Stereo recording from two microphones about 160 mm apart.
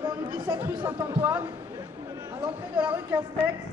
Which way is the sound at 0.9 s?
15° right (ahead or behind).